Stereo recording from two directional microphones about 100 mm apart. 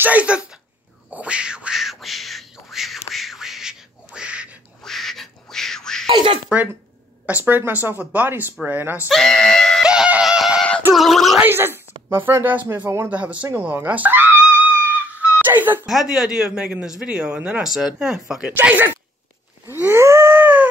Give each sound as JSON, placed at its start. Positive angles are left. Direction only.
{"t": 0.0, "sound": "speech", "side_deg": -15}
{"t": 1.1, "sound": "a sound", "side_deg": -10}
{"t": 4.8, "sound": "quack", "side_deg": 5}
{"t": 6.0, "sound": "a sound", "side_deg": -55}
{"t": 7.2, "sound": "speech", "side_deg": -20}
{"t": 9.1, "sound": "speech", "side_deg": 5}
{"t": 9.8, "sound": "music", "side_deg": -10}
{"t": 11.0, "sound": "speech", "side_deg": 0}
{"t": 11.4, "sound": "speech", "side_deg": -20}
{"t": 13.7, "sound": "music", "side_deg": -15}
{"t": 15.4, "sound": "a sound", "side_deg": -20}
{"t": 15.9, "sound": "speech", "side_deg": -5}
{"t": 19.7, "sound": "moo", "side_deg": -20}